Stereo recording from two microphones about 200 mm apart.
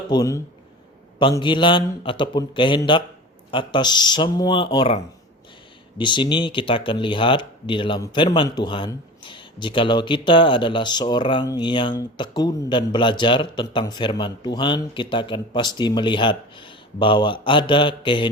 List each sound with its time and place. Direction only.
0.1 s speech: 15° left (ahead or behind)
6.0 s speech: 25° left (ahead or behind)